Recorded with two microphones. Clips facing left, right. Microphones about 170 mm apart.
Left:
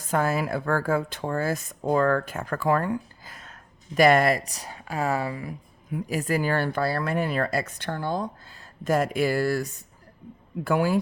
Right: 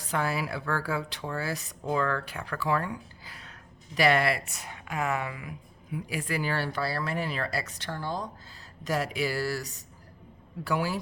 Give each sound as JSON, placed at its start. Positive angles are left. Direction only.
{"t": 0.0, "sound": "speech", "side_deg": 45}